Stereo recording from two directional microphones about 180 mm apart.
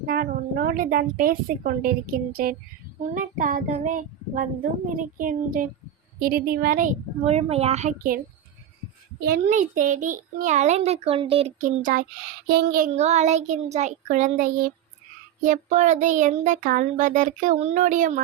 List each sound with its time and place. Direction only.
0.0 s child singing: 55° right (ahead or behind)
9.4 s a child's voice: 45° right (ahead or behind)
12.5 s a sound: 55° right (ahead or behind)
12.9 s a child's voice: 40° right (ahead or behind)
15.4 s child singing: 45° right (ahead or behind)